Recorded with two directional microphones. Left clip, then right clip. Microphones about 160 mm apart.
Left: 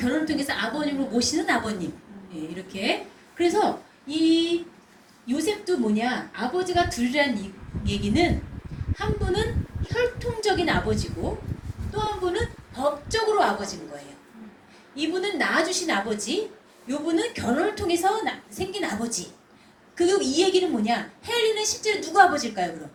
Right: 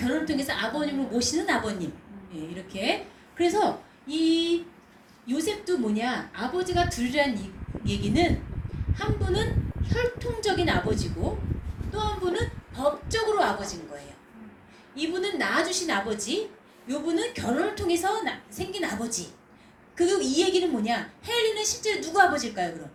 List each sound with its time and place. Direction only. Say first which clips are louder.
0.0 s a woman's voice: left 2 dB; 45° right (ahead or behind)
14.9 s a woman's voice: left 2 dB; 45° right (ahead or behind)
20.0 s a woman's voice: left 2 dB; 45° right (ahead or behind)